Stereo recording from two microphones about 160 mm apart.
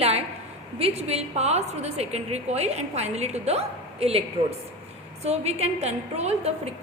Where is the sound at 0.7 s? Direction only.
40° right (ahead or behind).